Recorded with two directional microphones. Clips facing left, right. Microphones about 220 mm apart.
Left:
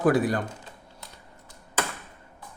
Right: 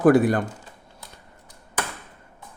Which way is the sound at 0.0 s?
55° right (ahead or behind).